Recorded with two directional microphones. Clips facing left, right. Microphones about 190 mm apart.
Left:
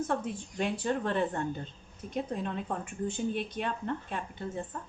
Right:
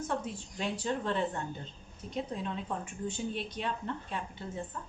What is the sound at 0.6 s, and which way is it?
Speech, 50° left (ahead or behind).